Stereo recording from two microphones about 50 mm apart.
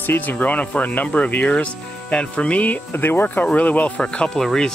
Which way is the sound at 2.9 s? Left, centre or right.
Left.